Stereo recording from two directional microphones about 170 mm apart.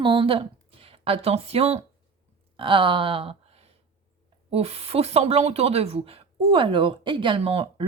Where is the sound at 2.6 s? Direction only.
30° right (ahead or behind).